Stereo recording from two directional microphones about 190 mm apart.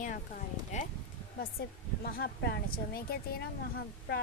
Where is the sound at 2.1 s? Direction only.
55° left (ahead or behind).